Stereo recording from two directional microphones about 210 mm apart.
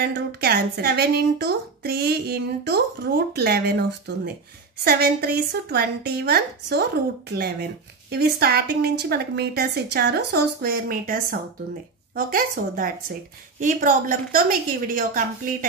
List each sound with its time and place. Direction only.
0.0 s a woman's voice: 50° right (ahead or behind)